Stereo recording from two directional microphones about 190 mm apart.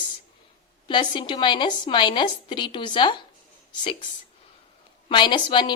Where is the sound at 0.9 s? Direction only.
25° left (ahead or behind).